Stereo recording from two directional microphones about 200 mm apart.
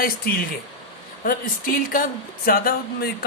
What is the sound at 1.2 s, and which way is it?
Speech, 45° left (ahead or behind).